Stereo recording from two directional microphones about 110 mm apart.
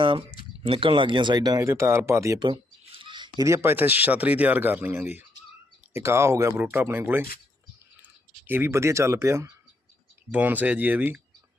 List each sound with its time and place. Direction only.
0.0 s speech: 50° right (ahead or behind)
1.6 s speech: 25° right (ahead or behind)
2.4 s a sound: 50° right (ahead or behind)
3.4 s speech: 25° right (ahead or behind)
8.4 s speech: 20° right (ahead or behind)